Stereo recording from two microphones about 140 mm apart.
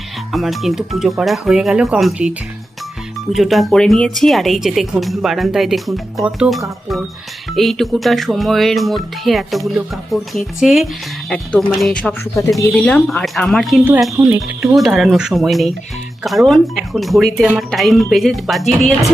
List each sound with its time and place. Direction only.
0.3 s speech: centre (ahead or behind)
3.3 s speech: centre (ahead or behind)
14.2 s speech: 15° right (ahead or behind)
14.8 s speech: centre (ahead or behind)